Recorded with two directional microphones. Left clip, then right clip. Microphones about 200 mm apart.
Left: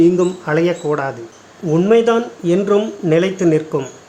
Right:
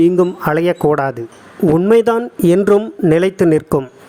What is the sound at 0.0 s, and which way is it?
A man's voice, 40° right (ahead or behind).